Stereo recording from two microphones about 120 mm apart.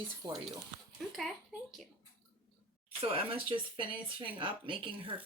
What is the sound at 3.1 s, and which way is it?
Speech, 55° right (ahead or behind).